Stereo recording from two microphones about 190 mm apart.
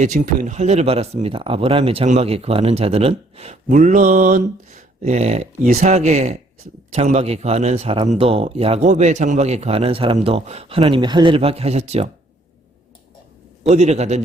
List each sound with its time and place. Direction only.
0.0 s speech: 40° right (ahead or behind)
13.7 s speech: 35° right (ahead or behind)